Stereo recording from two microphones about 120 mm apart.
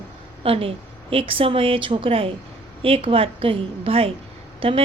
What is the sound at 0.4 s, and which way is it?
Speech, 50° right (ahead or behind).